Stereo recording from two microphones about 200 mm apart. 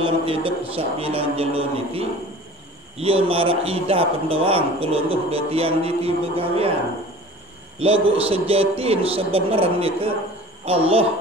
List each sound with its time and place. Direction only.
0.0 s a man's voice: 25° right (ahead or behind)
7.8 s a man's voice: 30° right (ahead or behind)